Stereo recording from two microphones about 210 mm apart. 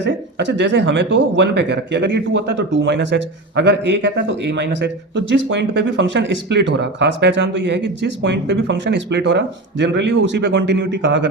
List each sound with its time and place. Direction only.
0.0 s speech: 55° right (ahead or behind)